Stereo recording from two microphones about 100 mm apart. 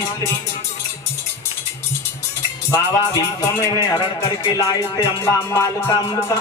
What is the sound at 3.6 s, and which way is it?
Speech, 40° left (ahead or behind).